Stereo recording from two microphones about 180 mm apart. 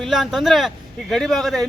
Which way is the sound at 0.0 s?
Centre (ahead or behind).